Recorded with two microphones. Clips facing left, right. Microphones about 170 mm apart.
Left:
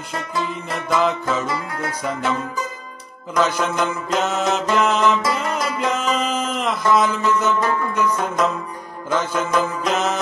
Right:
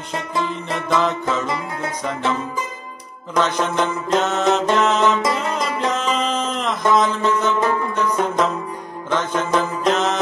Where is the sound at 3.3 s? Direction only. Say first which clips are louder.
Even; 5° left (ahead or behind).